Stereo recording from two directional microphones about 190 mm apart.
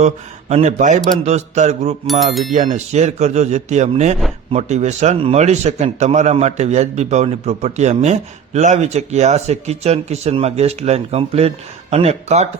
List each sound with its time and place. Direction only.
0.0 s a man's voice: 35° right (ahead or behind)
2.0 s speech: centre (ahead or behind)
2.5 s a man's voice: 40° right (ahead or behind)